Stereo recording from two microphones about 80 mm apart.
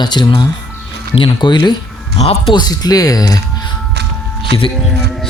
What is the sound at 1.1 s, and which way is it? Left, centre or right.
Speech, left.